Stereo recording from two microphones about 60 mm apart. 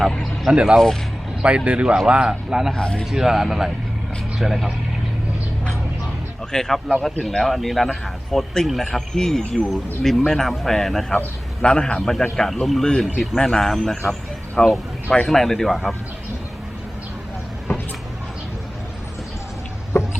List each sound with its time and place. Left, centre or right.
0.1 s speech: centre
0.5 s a man's voice: centre
2.7 s speech: centre
3.0 s speech: centre
6.5 s speech: centre
11.6 s speech: centre
11.9 s speech: centre
12.8 s speech: centre
14.1 s a sound: centre
15.3 s speech: centre